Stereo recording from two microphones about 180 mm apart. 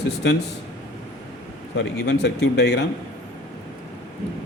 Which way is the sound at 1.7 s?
70° left (ahead or behind).